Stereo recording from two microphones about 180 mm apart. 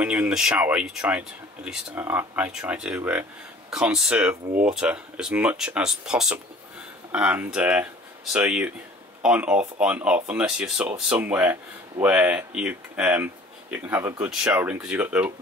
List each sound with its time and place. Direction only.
0.0 s speech: 5° right (ahead or behind)